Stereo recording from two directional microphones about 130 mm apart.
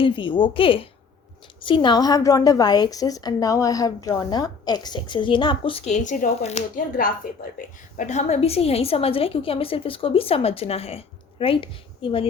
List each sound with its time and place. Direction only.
0.0 s a woman's voice: 40° left (ahead or behind)
5.8 s speech: 70° left (ahead or behind); by 7.1 s 90° left
7.9 s a woman's voice: 65° left (ahead or behind); by 12.3 s 45° left (ahead or behind)